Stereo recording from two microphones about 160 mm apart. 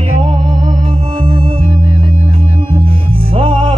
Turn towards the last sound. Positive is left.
turn(degrees=-35)  # may be behind; listen again after turning